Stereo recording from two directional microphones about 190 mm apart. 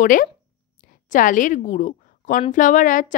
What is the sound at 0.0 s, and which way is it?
A woman's voice, 45° left (ahead or behind).